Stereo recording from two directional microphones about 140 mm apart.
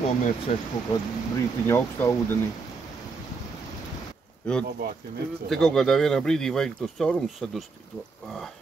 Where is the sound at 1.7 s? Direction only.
20° left (ahead or behind).